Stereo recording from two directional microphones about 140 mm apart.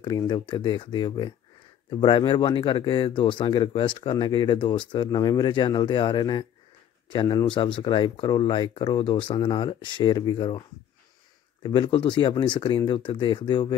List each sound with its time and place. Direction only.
0.0 s speech: 30° left (ahead or behind)
11.6 s speech: 35° left (ahead or behind)